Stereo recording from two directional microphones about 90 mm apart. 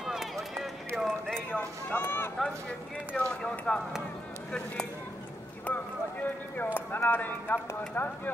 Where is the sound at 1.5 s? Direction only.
20° left (ahead or behind).